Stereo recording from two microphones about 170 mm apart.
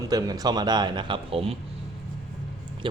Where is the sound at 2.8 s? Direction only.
30° right (ahead or behind).